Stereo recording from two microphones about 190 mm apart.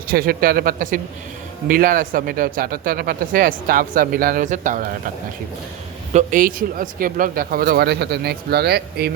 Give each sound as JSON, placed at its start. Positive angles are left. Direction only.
{"t": 0.1, "sound": "speech", "side_deg": -50}
{"t": 6.1, "sound": "a man's voice", "side_deg": -45}